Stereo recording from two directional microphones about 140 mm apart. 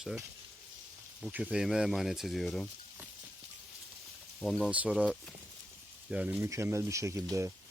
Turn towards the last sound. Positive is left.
turn(degrees=-20)  # may be behind; listen again after turning